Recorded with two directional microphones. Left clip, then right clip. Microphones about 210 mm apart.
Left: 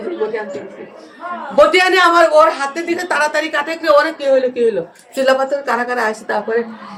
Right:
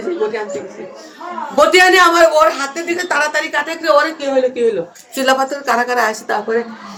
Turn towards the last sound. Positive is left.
turn(degrees=-5)  # may be behind; listen again after turning